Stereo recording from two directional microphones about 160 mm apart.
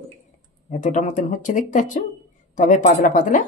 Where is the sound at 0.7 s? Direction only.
50° left (ahead or behind).